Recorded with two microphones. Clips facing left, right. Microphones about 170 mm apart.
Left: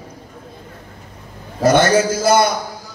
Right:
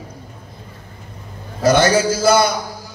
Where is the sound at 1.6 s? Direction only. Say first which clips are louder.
Left 1 dB; 55° left (ahead or behind).